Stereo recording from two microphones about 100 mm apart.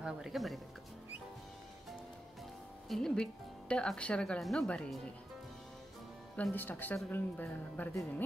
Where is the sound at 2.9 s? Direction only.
5° left (ahead or behind).